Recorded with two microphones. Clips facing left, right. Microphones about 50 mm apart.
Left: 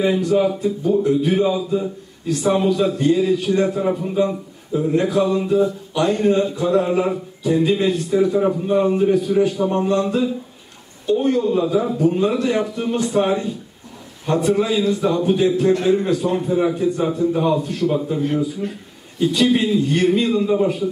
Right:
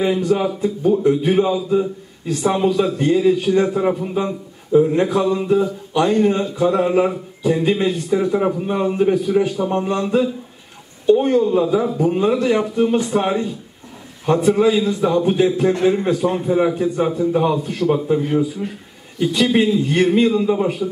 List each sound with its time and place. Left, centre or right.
0.0 s a man's voice: right
11.6 s a man's voice: centre
18.2 s speech: centre
19.1 s a man's voice: right